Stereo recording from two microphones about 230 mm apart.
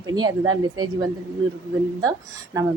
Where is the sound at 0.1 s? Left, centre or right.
Centre.